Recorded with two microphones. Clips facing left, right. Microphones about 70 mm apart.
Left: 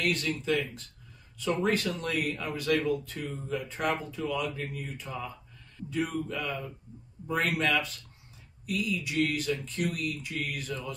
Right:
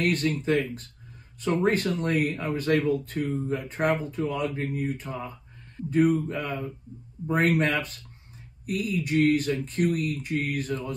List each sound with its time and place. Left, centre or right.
0.0 s speech: right